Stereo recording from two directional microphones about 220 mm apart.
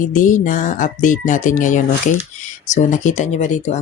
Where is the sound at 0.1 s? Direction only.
35° left (ahead or behind).